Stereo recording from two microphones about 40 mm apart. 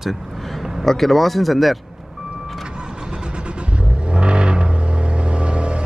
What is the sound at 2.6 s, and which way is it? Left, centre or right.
Vehicle, right.